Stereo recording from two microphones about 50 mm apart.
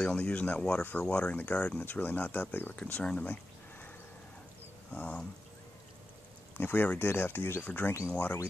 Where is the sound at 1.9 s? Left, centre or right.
Left.